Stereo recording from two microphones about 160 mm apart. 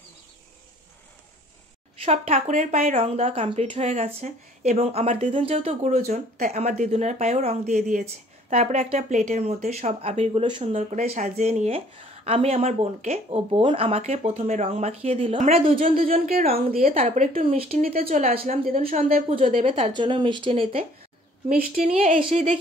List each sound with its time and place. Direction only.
2.0 s speech: 40° right (ahead or behind)
3.4 s a woman's voice: 35° right (ahead or behind)
3.8 s a woman's voice: 45° right (ahead or behind)
10.7 s a woman's voice: 45° right (ahead or behind)
16.3 s a woman's voice: 70° right (ahead or behind)
16.9 s a woman's voice: 40° right (ahead or behind)
17.7 s speech: 65° right (ahead or behind)
18.0 s a woman's voice: 40° right (ahead or behind)
18.3 s a woman's voice: 65° right (ahead or behind)
18.8 s a woman's voice: 40° right (ahead or behind)